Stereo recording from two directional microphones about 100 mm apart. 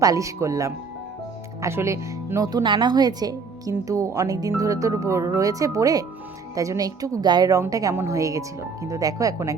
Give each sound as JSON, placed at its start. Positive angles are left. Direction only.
{"t": 0.0, "sound": "a woman's voice", "side_deg": -35}
{"t": 2.5, "sound": "a woman's voice", "side_deg": -45}